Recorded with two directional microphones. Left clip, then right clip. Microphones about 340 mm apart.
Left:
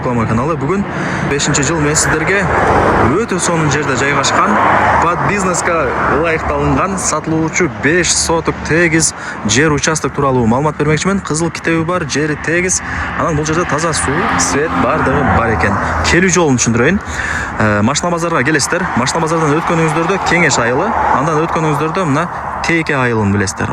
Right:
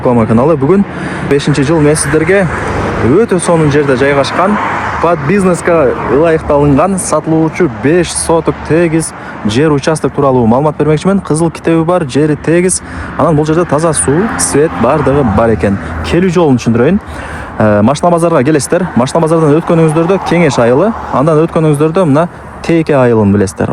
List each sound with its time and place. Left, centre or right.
0.1 s speech: centre
4.5 s speech: left
5.0 s speech: centre
14.2 s speech: left
14.8 s speech: centre